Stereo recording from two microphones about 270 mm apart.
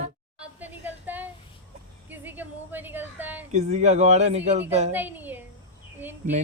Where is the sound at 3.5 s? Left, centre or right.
Right.